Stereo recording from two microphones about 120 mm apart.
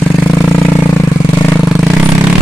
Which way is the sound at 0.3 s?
20° left (ahead or behind).